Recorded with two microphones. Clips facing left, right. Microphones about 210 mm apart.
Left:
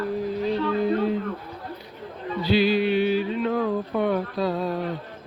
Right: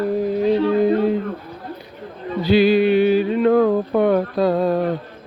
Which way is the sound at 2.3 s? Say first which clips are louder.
Right 6 dB; 50° right (ahead or behind).